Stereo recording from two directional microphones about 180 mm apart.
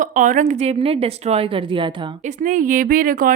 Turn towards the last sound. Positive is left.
turn(degrees=-50)  # may be behind; listen again after turning